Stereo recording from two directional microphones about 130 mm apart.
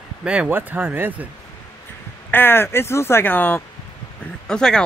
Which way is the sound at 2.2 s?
15° left (ahead or behind).